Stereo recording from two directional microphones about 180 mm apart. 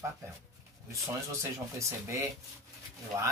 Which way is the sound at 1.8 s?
15° right (ahead or behind).